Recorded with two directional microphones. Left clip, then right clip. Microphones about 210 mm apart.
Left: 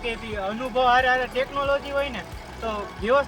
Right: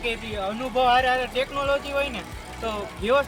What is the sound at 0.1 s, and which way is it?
Speech, 5° right (ahead or behind).